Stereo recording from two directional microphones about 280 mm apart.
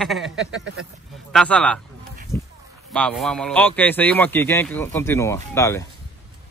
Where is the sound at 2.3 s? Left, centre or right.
Centre.